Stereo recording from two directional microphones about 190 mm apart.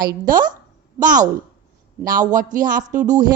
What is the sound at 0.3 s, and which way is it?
Speech, 45° right (ahead or behind).